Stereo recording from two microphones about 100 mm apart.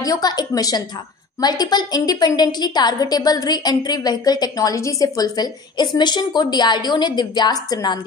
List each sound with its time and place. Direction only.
0.0 s a woman's voice: 40° left (ahead or behind)